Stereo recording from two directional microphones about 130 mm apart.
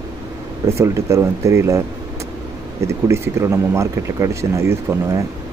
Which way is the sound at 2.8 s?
20° right (ahead or behind).